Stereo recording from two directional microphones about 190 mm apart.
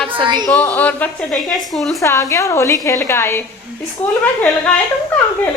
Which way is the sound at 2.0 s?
15° left (ahead or behind).